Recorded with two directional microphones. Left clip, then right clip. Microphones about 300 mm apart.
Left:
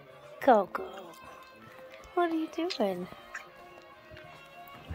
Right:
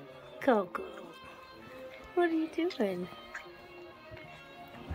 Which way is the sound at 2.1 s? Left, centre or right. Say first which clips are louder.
Even; centre.